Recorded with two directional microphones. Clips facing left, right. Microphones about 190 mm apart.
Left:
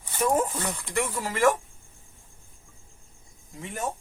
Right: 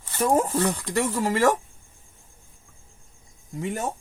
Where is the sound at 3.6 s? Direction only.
40° right (ahead or behind).